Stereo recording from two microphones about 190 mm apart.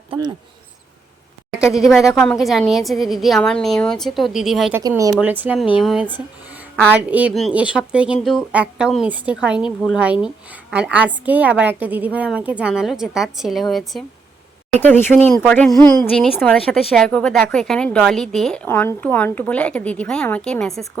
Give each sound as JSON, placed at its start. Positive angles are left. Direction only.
{"t": 0.1, "sound": "speech", "side_deg": -20}
{"t": 1.7, "sound": "a woman's voice", "side_deg": 0}
{"t": 4.7, "sound": "speech", "side_deg": -20}
{"t": 5.1, "sound": "a woman's voice", "side_deg": -10}
{"t": 14.8, "sound": "a woman's voice", "side_deg": 10}